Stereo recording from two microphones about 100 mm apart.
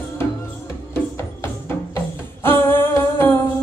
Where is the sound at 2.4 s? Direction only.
20° left (ahead or behind).